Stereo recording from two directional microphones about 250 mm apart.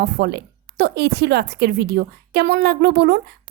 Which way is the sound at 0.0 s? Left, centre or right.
Right.